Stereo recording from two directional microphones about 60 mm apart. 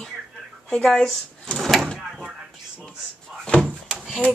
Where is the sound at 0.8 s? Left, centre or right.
Centre.